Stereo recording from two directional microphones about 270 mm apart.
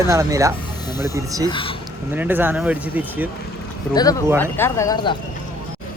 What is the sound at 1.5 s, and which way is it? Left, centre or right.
Speech, centre.